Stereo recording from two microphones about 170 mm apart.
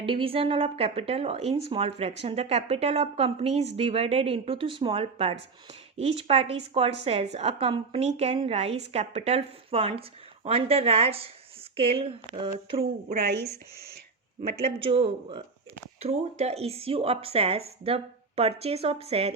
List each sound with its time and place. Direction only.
0.0 s speech: 30° right (ahead or behind)
13.1 s speech: 75° right (ahead or behind)
14.6 s speech: 35° right (ahead or behind)